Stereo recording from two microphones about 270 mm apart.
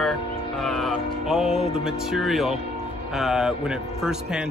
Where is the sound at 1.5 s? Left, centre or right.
Left.